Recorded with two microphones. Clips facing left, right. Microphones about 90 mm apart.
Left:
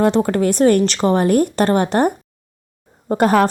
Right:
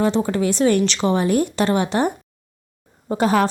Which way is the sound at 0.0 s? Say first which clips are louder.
Left 4 dB; 55° left (ahead or behind).